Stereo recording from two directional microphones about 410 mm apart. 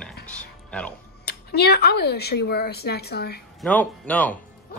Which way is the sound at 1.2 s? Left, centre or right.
Left.